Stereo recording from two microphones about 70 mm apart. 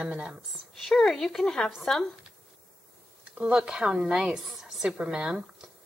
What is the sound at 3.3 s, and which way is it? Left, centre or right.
A woman's voice, centre.